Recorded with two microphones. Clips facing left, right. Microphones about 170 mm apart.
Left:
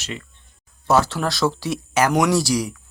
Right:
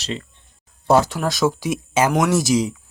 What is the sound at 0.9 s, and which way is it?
Speech, 20° right (ahead or behind).